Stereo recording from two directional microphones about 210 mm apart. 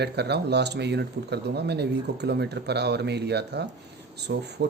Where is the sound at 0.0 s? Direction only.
50° right (ahead or behind).